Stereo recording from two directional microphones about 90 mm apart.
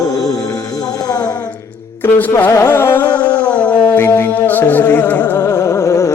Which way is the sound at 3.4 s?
15° left (ahead or behind).